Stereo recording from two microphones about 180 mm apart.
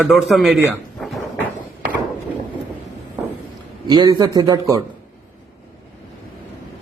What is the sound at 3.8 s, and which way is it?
A man's voice, 20° right (ahead or behind).